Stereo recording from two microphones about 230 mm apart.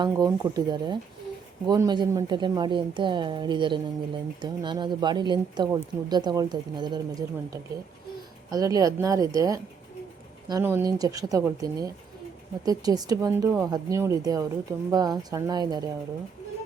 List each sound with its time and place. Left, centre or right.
0.0 s a woman's voice: centre